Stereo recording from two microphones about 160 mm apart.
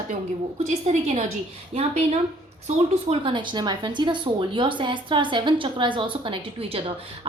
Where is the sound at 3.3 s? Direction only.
30° right (ahead or behind).